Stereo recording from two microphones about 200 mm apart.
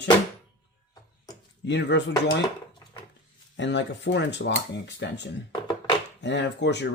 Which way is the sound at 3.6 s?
60° left (ahead or behind).